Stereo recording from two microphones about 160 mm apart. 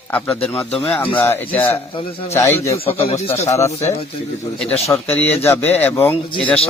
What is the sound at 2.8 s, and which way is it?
Speech, 35° left (ahead or behind).